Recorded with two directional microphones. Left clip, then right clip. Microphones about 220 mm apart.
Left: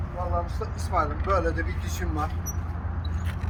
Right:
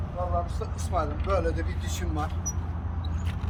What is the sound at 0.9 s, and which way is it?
Speech, 20° right (ahead or behind).